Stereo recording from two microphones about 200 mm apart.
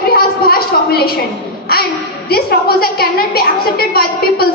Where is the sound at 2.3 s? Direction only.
50° left (ahead or behind).